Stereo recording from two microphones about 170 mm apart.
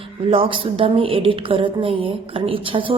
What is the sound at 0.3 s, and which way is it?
A woman's voice, 30° right (ahead or behind).